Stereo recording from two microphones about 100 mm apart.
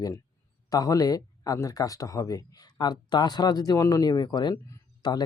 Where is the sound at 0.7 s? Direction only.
35° left (ahead or behind).